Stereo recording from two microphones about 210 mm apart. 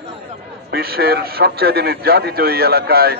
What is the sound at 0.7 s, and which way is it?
A man's voice, 45° right (ahead or behind).